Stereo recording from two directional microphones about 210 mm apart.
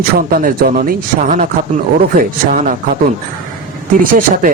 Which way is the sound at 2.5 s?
40° right (ahead or behind).